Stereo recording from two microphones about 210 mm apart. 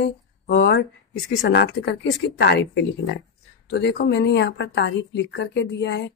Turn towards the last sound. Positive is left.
turn(degrees=55)  # may be behind; listen again after turning